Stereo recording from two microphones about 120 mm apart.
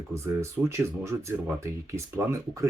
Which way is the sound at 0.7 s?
20° right (ahead or behind).